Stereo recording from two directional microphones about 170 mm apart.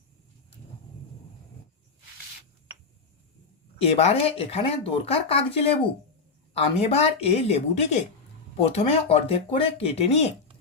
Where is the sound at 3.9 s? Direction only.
35° left (ahead or behind).